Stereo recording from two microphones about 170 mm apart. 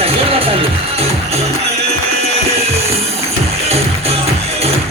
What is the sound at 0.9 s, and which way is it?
Music, 40° right (ahead or behind).